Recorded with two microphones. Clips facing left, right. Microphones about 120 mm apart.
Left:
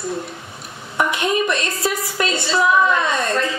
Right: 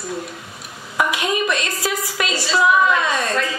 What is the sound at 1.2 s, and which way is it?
A man's voice, 30° left (ahead or behind).